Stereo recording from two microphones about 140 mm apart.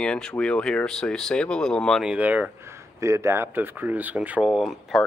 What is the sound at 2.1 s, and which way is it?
Speech, 10° right (ahead or behind).